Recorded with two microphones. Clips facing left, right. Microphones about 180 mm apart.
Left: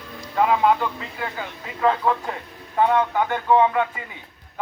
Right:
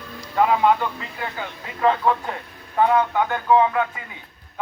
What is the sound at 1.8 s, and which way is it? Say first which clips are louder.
Speech: right 1 dB; 5° left (ahead or behind).